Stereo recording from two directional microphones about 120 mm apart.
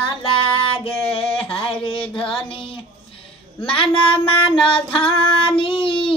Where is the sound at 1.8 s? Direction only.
45° left (ahead or behind).